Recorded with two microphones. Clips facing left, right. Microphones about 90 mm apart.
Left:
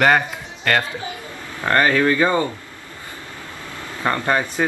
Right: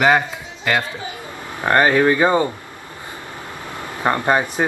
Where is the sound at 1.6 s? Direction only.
20° right (ahead or behind).